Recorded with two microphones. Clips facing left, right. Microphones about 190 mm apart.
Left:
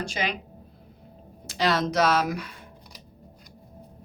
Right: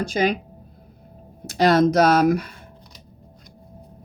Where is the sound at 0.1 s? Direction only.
45° right (ahead or behind).